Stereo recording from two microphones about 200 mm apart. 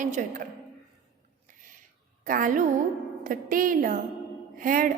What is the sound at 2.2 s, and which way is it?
A woman's voice, 45° right (ahead or behind).